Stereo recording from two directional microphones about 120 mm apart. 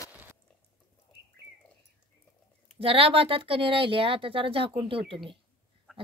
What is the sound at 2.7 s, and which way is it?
Speech, 50° right (ahead or behind).